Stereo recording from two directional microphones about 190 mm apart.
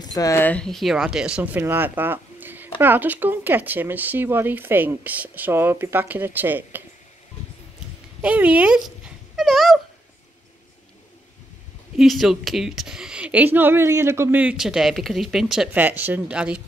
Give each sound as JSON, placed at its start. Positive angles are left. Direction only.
{"t": 0.0, "sound": "speech", "side_deg": 20}
{"t": 8.2, "sound": "dog", "side_deg": -5}
{"t": 12.0, "sound": "a woman's voice", "side_deg": 0}